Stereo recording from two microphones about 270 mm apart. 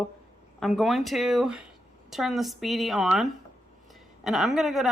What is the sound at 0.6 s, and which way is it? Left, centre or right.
Speech, centre.